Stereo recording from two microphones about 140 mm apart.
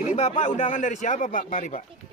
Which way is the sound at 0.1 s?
55° left (ahead or behind).